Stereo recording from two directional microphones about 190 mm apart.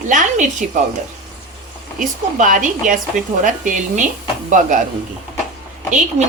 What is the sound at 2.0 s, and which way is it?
A woman's voice, 45° right (ahead or behind).